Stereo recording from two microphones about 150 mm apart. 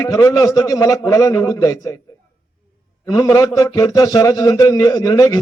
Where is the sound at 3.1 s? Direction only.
20° left (ahead or behind).